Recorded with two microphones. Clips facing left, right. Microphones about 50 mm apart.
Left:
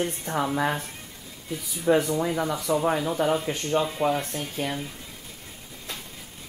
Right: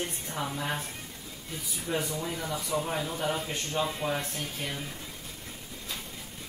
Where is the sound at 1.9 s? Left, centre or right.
Left.